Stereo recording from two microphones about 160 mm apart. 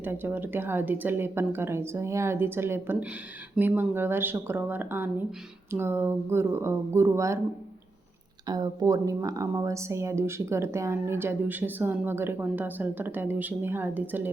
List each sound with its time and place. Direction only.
0.0 s speech: 15° right (ahead or behind)
8.4 s speech: 25° right (ahead or behind)